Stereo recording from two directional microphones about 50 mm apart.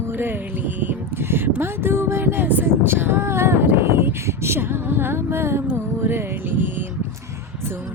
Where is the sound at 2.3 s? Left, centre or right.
Right.